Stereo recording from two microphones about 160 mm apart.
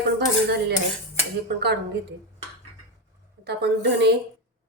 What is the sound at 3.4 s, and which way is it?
Speech, 90° right.